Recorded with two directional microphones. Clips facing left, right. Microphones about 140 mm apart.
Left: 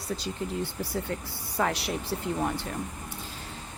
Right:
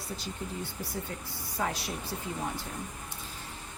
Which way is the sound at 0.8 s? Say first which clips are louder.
Left 6 dB; 70° left (ahead or behind).